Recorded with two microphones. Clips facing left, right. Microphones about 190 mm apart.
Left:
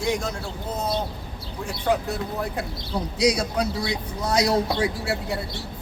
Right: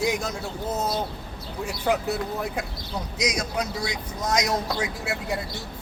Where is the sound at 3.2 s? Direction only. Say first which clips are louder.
Left 5 dB; 30° left (ahead or behind).